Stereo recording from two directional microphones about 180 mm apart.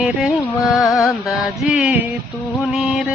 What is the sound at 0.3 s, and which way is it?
Music, 15° left (ahead or behind).